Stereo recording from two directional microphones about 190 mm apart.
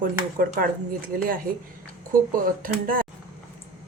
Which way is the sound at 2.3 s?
45° right (ahead or behind).